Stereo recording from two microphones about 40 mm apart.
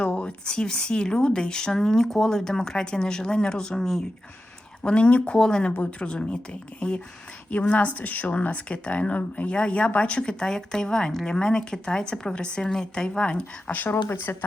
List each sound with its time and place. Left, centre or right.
0.0 s speech: left
3.8 s speech: centre
4.8 s speech: left
5.4 s speech: centre
7.5 s speech: left
9.5 s a woman's voice: left
13.1 s speech: left
13.8 s speech: left